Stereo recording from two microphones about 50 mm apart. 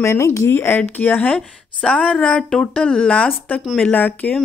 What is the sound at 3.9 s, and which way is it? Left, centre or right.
Speech, left.